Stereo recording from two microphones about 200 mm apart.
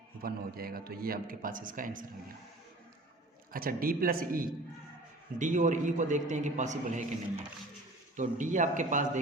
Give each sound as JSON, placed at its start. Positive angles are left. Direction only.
{"t": 0.2, "sound": "a man's voice", "side_deg": -45}
{"t": 3.5, "sound": "a man's voice", "side_deg": -45}
{"t": 8.1, "sound": "a man's voice", "side_deg": -40}